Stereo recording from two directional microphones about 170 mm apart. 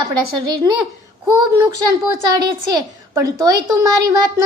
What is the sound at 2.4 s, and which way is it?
A woman's voice, 20° right (ahead or behind).